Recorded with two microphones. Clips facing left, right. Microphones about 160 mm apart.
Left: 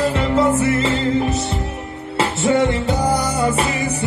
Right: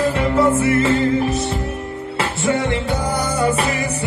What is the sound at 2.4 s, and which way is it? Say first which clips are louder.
Music: left 3 dB; 20° left (ahead or behind).